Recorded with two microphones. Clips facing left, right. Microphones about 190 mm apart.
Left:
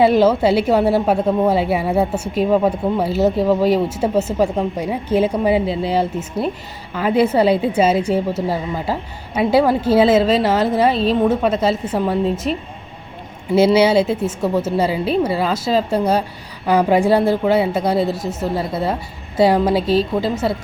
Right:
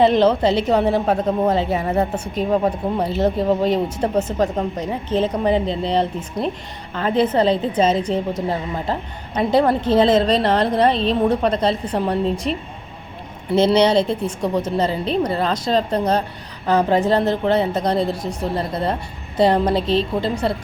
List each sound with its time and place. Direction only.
0.0 s a woman's voice: 5° left (ahead or behind)
13.6 s a woman's voice: 5° left (ahead or behind)
18.2 s a woman's voice: 25° left (ahead or behind)
18.4 s a woman's voice: 5° left (ahead or behind)